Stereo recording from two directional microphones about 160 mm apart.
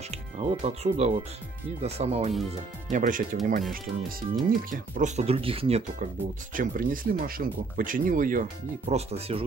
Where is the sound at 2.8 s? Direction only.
55° right (ahead or behind); by 5.8 s 35° right (ahead or behind).